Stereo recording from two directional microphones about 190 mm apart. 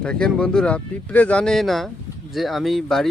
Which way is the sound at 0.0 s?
5° left (ahead or behind).